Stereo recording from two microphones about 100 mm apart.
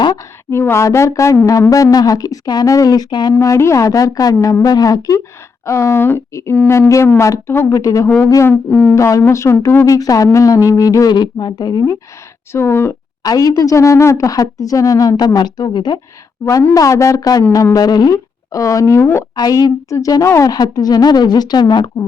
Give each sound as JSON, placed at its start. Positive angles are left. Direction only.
{"t": 0.5, "sound": "speech", "side_deg": 25}
{"t": 3.3, "sound": "speech", "side_deg": 30}
{"t": 8.4, "sound": "a sound", "side_deg": 15}
{"t": 9.0, "sound": "speech", "side_deg": 30}
{"t": 12.5, "sound": "speech", "side_deg": 25}
{"t": 13.2, "sound": "speech", "side_deg": 35}
{"t": 16.7, "sound": "speech", "side_deg": 30}
{"t": 19.4, "sound": "speech", "side_deg": 40}
{"t": 20.5, "sound": "speech", "side_deg": 40}